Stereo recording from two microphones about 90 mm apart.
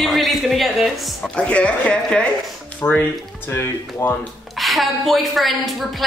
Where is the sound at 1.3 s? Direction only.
15° left (ahead or behind).